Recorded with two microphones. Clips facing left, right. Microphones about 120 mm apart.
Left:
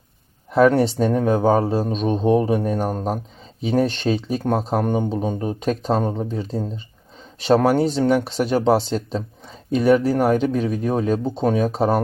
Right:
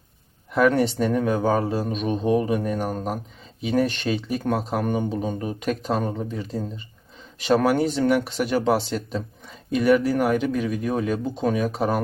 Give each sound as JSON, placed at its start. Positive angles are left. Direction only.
{"t": 0.5, "sound": "speech", "side_deg": 30}